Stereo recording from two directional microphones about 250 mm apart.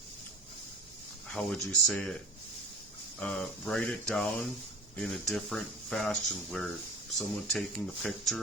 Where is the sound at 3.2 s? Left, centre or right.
Centre.